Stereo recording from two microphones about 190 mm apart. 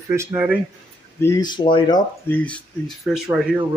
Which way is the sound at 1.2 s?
20° left (ahead or behind).